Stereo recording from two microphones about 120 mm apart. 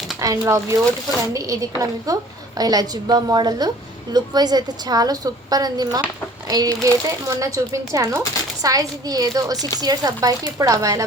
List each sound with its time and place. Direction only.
0.2 s a woman's voice: 25° right (ahead or behind)